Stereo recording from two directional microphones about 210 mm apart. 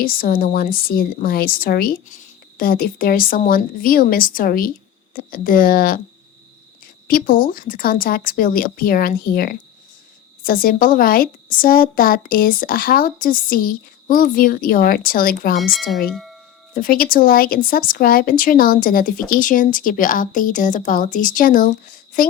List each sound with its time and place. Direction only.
0.0 s a woman's voice: 45° left (ahead or behind)
7.1 s a woman's voice: 40° left (ahead or behind)
15.7 s speech: centre (ahead or behind)
16.0 s wind chime: centre (ahead or behind)
16.7 s a woman's voice: 40° left (ahead or behind)